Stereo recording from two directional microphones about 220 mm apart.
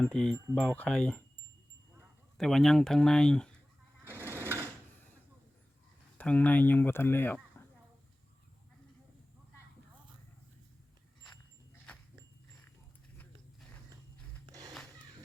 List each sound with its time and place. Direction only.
0.0 s speech: 5° left (ahead or behind)
2.4 s speech: centre (ahead or behind)
4.0 s sewing machine: 10° right (ahead or behind)
6.1 s speech: 5° left (ahead or behind)
14.4 s a sound: 15° right (ahead or behind)